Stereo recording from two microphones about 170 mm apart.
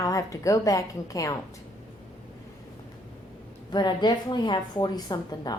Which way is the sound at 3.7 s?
25° left (ahead or behind).